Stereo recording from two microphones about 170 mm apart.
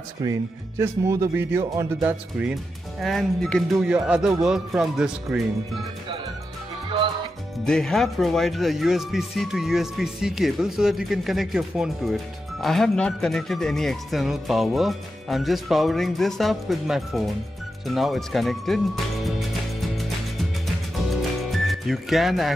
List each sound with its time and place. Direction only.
0.2 s speech: 15° right (ahead or behind)
7.6 s speech: 5° left (ahead or behind)
21.5 s music: centre (ahead or behind)